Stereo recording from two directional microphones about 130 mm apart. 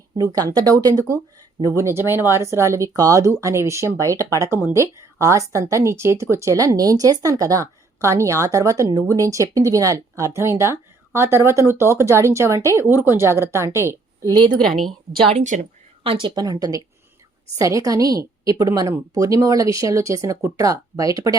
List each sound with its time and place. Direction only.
0.2 s speech: 25° right (ahead or behind)
14.8 s a woman's voice: centre (ahead or behind)
15.3 s speech: 65° right (ahead or behind)
16.2 s speech: 30° right (ahead or behind)